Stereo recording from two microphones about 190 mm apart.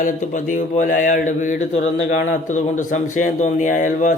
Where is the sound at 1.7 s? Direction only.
80° left.